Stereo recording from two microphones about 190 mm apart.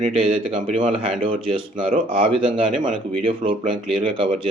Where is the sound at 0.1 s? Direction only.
30° right (ahead or behind).